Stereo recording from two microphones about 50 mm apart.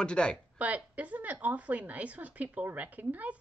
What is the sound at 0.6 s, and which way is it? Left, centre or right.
A woman's voice, right.